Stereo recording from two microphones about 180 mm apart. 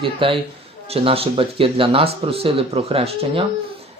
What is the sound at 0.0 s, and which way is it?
Speech, 30° right (ahead or behind).